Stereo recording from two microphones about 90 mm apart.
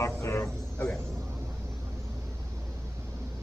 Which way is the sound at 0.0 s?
35° left (ahead or behind).